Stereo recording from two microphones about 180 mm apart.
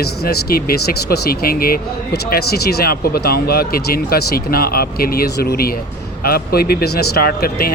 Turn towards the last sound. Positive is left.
turn(degrees=55)  # may be behind; listen again after turning